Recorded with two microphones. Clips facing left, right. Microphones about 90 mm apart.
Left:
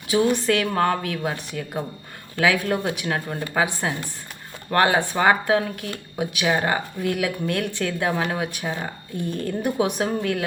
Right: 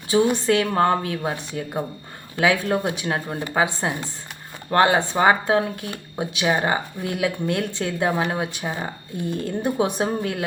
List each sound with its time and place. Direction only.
0.1 s speech: 25° right (ahead or behind)